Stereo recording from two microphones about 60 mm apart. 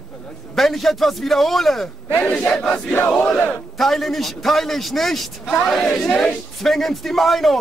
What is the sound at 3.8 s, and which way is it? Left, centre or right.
A man's voice, centre.